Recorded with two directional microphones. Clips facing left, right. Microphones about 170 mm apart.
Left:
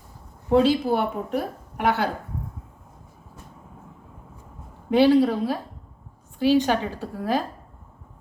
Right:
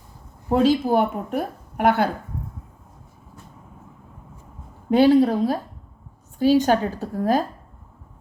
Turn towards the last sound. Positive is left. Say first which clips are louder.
# right 4 dB
turn(degrees=-45)  # may be behind; listen again after turning